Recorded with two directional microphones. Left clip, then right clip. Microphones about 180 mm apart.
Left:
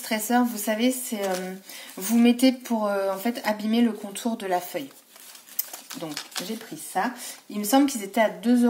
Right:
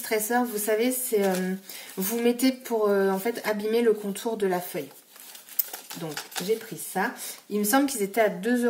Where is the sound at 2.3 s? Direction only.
35° left (ahead or behind).